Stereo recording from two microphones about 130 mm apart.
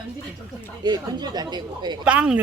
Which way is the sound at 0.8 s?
35° right (ahead or behind).